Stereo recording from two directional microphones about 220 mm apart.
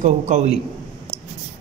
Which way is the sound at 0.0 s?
30° right (ahead or behind).